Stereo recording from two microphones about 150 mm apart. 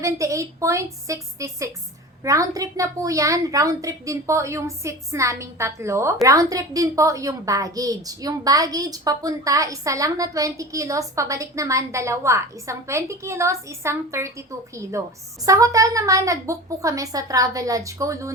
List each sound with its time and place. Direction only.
0.0 s a woman's voice: 20° right (ahead or behind)